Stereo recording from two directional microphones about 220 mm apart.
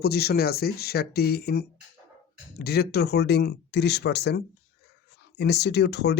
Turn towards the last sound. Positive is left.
turn(degrees=50)  # may be behind; listen again after turning